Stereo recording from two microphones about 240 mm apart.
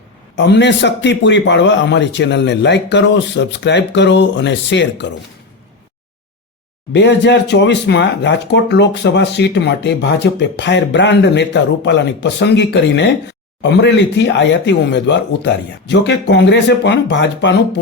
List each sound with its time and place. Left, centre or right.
0.3 s speech: left
6.9 s speech: left